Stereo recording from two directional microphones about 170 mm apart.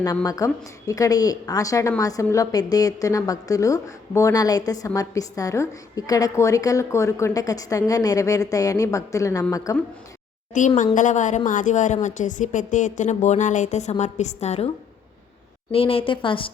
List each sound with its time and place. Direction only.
0.0 s a woman's voice: 20° left (ahead or behind)
10.5 s a woman's voice: 45° left (ahead or behind)
15.7 s a woman's voice: 35° left (ahead or behind)